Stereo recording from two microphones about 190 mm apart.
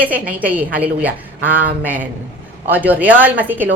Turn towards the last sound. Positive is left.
turn(degrees=-10)  # may be behind; listen again after turning